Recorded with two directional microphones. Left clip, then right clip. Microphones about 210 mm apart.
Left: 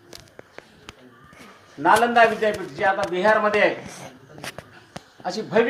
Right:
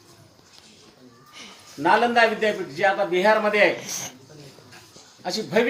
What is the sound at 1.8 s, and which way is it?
A man's voice, 5° right (ahead or behind).